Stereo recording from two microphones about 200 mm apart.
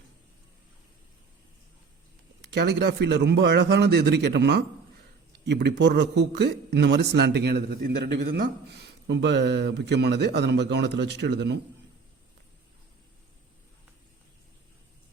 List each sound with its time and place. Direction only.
2.5 s a man's voice: 60° right (ahead or behind)